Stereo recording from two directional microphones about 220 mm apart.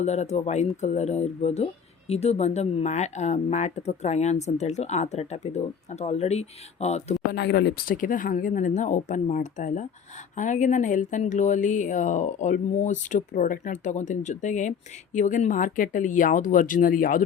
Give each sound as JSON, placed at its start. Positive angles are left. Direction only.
{"t": 0.0, "sound": "speech", "side_deg": 30}
{"t": 7.3, "sound": "speech", "side_deg": 50}